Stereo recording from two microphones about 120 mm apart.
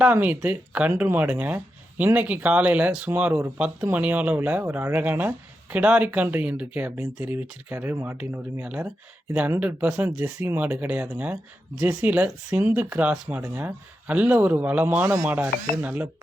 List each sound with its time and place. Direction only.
0.0 s speech: 15° right (ahead or behind)